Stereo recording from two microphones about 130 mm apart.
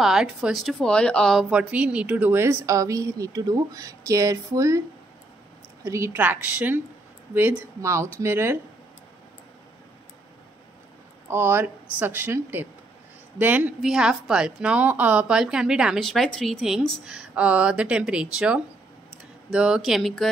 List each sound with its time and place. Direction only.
0.0 s speech: 5° right (ahead or behind); by 4.8 s 25° right (ahead or behind)
5.9 s speech: 20° right (ahead or behind)
11.2 s a woman's voice: 15° right (ahead or behind); by 20.2 s centre (ahead or behind)